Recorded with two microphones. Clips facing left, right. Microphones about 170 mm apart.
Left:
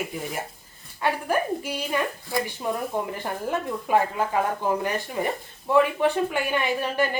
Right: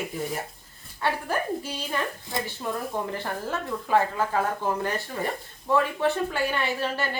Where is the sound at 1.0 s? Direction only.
15° left (ahead or behind).